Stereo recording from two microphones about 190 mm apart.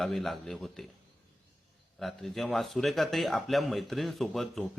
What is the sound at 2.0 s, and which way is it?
Speech, centre (ahead or behind).